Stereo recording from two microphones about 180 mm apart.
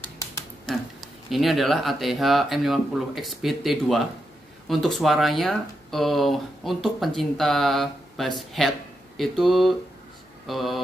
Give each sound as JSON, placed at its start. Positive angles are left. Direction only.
{"t": 0.7, "sound": "speech", "side_deg": 0}